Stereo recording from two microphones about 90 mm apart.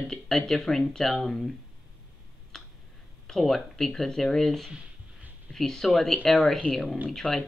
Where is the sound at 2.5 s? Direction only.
5° left (ahead or behind).